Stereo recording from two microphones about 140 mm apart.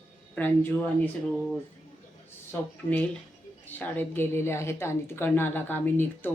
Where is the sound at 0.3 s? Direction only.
10° left (ahead or behind).